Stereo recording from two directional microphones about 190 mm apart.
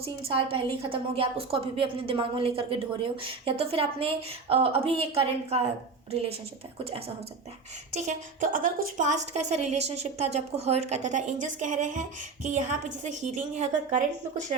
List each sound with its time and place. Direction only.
0.0 s a woman's voice: 30° right (ahead or behind)
7.9 s a woman's voice: 40° right (ahead or behind)